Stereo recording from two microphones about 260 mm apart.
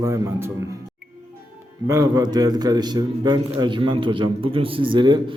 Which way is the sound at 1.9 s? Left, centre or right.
Centre.